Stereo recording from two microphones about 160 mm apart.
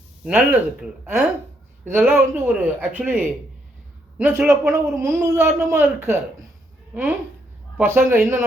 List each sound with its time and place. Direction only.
0.3 s speech: 5° right (ahead or behind)
7.8 s speech: 15° right (ahead or behind)